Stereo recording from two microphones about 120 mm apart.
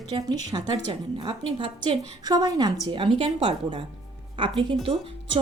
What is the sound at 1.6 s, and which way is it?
Speech, 50° right (ahead or behind).